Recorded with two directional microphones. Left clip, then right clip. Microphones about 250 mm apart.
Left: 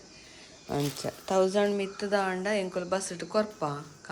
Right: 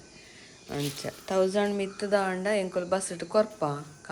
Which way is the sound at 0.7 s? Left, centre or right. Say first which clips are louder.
Left 2 dB; centre.